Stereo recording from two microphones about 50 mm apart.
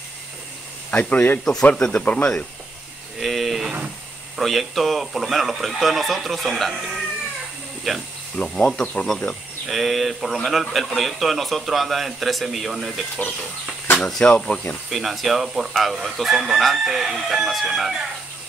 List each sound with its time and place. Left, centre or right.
1.0 s speech: left
1.4 s speech: centre
1.9 s speech: left
3.2 s speech: centre
8.4 s speech: left
9.7 s speech: centre
14.0 s speech: centre
14.3 s speech: left
14.9 s speech: centre